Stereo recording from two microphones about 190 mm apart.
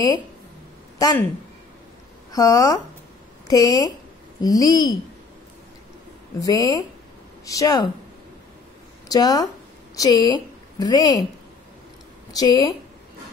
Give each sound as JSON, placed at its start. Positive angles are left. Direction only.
{"t": 0.9, "sound": "a woman's voice", "side_deg": 20}
{"t": 2.3, "sound": "a woman's voice", "side_deg": 20}
{"t": 6.4, "sound": "a woman's voice", "side_deg": 20}
{"t": 9.1, "sound": "a woman's voice", "side_deg": 20}
{"t": 12.3, "sound": "a woman's voice", "side_deg": 20}